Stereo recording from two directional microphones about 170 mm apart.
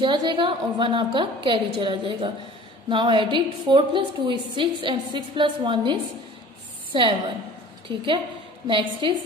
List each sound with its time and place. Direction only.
0.0 s a woman's voice: 25° right (ahead or behind)